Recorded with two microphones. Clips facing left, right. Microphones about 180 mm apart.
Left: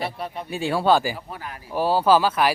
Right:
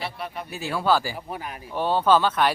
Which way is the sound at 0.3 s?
30° left (ahead or behind).